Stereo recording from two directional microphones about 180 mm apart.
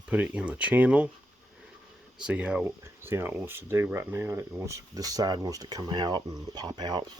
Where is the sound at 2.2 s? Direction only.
5° right (ahead or behind); by 7.1 s 25° right (ahead or behind).